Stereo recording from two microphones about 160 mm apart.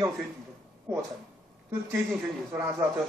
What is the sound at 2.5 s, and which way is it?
Speech, 15° right (ahead or behind).